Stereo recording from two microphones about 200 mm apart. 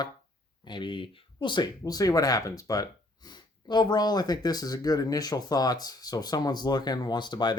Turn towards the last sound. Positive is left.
turn(degrees=20)  # may be behind; listen again after turning